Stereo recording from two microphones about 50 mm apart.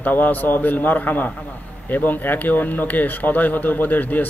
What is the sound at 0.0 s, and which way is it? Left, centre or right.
A man's voice, left.